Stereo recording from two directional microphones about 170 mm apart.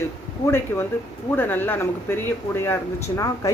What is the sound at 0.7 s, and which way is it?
Speech, 15° left (ahead or behind).